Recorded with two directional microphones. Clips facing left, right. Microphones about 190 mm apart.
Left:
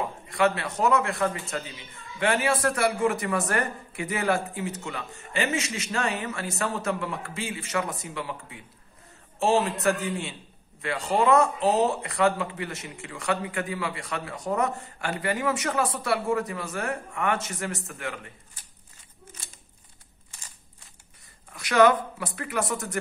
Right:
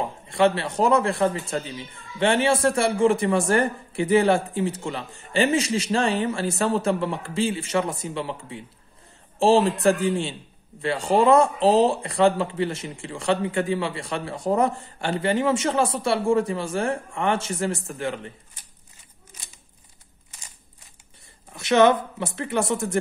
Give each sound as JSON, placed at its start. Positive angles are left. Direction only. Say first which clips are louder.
{"t": 0.0, "sound": "a man's voice", "louder": "right 4 dB", "side_deg": -30}
{"t": 21.5, "sound": "a man's voice", "louder": "right 2 dB", "side_deg": -25}